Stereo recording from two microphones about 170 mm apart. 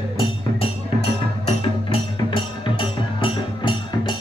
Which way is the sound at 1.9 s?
30° left (ahead or behind).